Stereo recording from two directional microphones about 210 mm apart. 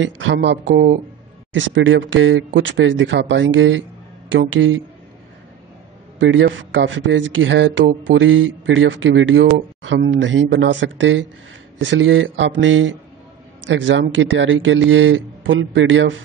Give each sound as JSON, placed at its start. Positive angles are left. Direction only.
{"t": 0.0, "sound": "speech", "side_deg": -60}
{"t": 6.1, "sound": "speech", "side_deg": -60}